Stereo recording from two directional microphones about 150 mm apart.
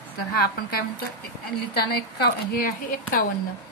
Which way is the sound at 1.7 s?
90° left.